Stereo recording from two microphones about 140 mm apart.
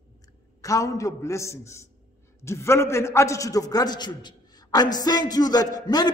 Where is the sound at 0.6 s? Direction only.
25° left (ahead or behind).